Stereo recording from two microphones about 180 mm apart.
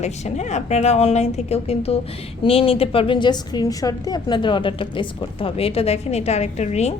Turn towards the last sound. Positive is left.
turn(degrees=40)  # may be behind; listen again after turning